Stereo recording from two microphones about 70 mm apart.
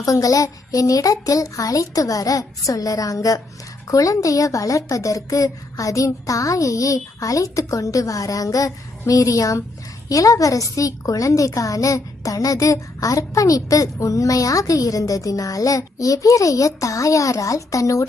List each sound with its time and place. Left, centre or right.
0.0 s a child's voice: left